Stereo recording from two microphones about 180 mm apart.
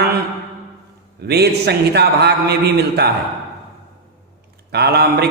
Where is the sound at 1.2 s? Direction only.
65° right (ahead or behind).